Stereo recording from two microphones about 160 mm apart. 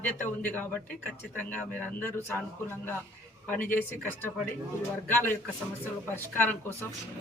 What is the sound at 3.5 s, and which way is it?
Speech, 15° left (ahead or behind).